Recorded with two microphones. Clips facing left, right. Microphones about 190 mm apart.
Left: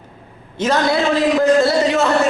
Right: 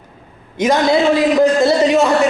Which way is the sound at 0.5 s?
15° right (ahead or behind).